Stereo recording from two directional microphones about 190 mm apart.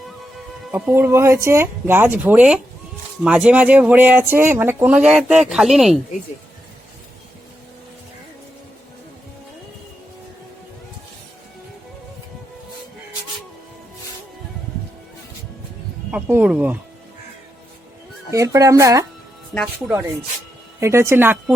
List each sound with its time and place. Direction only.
0.7 s speech: 10° right (ahead or behind)
16.1 s speech: 10° right (ahead or behind)
18.3 s speech: 15° right (ahead or behind)
20.8 s speech: 15° right (ahead or behind)